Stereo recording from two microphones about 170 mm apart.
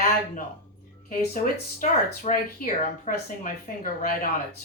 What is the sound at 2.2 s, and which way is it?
Speech, 55° left (ahead or behind).